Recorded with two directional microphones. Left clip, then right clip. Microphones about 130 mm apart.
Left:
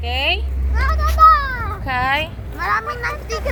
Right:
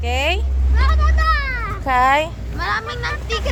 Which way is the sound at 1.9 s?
40° right (ahead or behind).